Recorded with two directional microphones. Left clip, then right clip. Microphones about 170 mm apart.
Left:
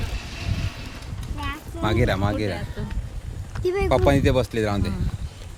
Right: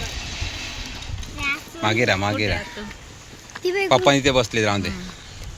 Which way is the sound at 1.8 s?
15° left (ahead or behind).